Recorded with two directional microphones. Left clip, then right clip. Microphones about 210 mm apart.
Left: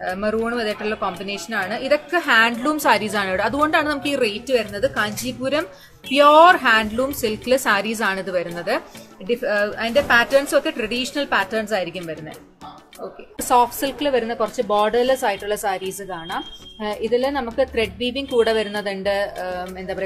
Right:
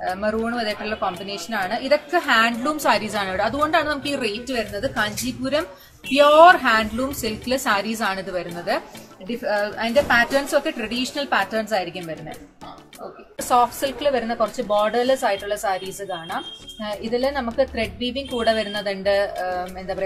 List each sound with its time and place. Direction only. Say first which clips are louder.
0.0 s a woman's voice: left 1 dB; 50° left (ahead or behind)
13.4 s a woman's voice: left 1 dB; 55° left (ahead or behind)
16.8 s a woman's voice: left 3 dB; 55° left (ahead or behind)